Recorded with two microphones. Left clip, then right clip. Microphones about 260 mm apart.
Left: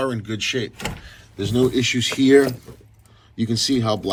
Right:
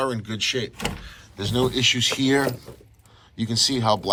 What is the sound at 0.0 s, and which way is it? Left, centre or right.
Speech, centre.